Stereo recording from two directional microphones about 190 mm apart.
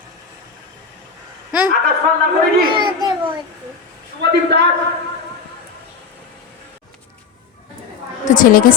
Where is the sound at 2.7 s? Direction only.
25° right (ahead or behind).